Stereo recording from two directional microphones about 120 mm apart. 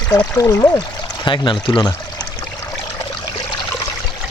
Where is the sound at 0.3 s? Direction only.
25° left (ahead or behind).